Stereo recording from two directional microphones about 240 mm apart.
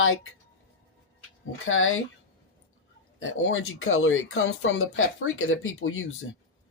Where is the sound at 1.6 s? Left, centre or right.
Left.